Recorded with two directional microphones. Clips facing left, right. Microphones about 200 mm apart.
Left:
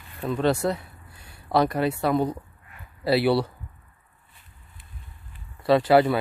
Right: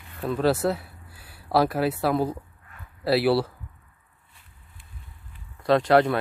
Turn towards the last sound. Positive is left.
turn(degrees=5)  # may be behind; listen again after turning